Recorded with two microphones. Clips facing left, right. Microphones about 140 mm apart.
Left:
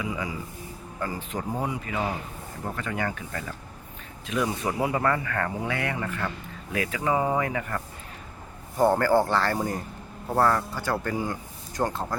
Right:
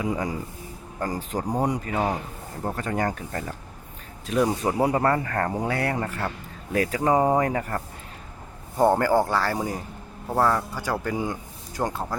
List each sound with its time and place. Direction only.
0.0 s speech: 40° right (ahead or behind)
8.8 s speech: 15° right (ahead or behind)